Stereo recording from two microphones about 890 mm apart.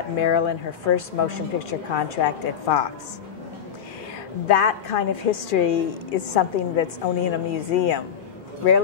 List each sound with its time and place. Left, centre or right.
0.2 s a woman's voice: left
4.5 s a woman's voice: left